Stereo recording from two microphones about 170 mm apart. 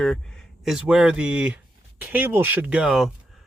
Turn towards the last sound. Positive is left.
turn(degrees=-5)  # may be behind; listen again after turning